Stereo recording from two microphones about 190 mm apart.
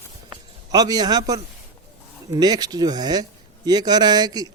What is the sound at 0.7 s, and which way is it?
Speech, 20° right (ahead or behind).